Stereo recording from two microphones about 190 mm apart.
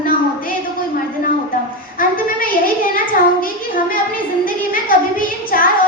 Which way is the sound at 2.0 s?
45° left (ahead or behind).